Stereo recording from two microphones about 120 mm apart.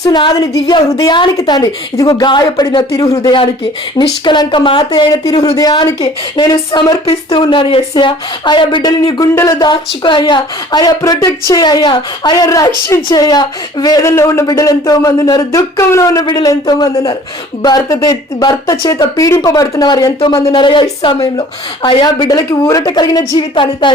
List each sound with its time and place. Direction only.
0.0 s speech: 35° left (ahead or behind)
7.3 s speech: 45° left (ahead or behind)
9.3 s speech: 25° left (ahead or behind)
9.6 s speech: 40° left (ahead or behind)
12.5 s speech: 25° left (ahead or behind); by 21.2 s 40° left (ahead or behind)
22.0 s speech: 30° left (ahead or behind)